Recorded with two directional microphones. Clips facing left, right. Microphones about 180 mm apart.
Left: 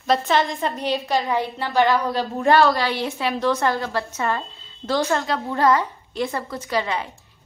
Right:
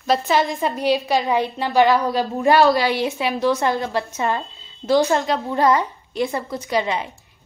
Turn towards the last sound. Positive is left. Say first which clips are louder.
# right 2 dB
turn(degrees=-20)  # may be behind; listen again after turning